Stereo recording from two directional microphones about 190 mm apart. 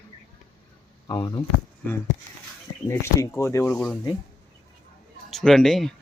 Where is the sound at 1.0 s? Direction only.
20° left (ahead or behind).